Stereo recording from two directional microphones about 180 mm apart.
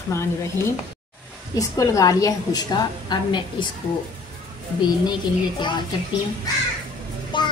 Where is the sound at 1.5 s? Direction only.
20° left (ahead or behind).